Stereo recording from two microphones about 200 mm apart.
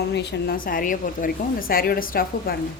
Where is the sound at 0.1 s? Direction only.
55° left (ahead or behind).